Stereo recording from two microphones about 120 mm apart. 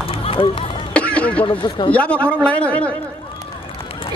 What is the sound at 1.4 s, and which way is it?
Speech, 45° left (ahead or behind).